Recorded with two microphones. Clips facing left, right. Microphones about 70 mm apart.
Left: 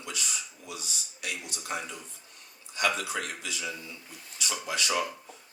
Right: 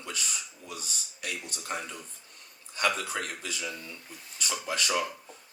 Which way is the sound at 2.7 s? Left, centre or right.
Right.